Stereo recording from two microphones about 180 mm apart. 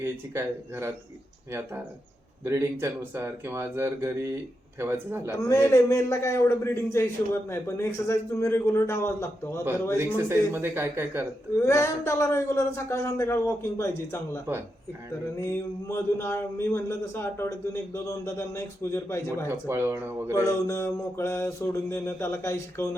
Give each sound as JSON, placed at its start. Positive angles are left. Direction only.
{"t": 0.0, "sound": "speech", "side_deg": -15}
{"t": 2.4, "sound": "speech", "side_deg": -15}
{"t": 5.4, "sound": "a man's voice", "side_deg": 15}
{"t": 10.2, "sound": "speech", "side_deg": -10}
{"t": 11.6, "sound": "a man's voice", "side_deg": 15}
{"t": 15.4, "sound": "a man's voice", "side_deg": 15}
{"t": 19.5, "sound": "speech", "side_deg": -15}
{"t": 20.4, "sound": "a man's voice", "side_deg": 15}